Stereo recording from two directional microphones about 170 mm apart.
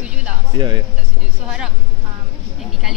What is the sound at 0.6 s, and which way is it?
Speech, 25° right (ahead or behind).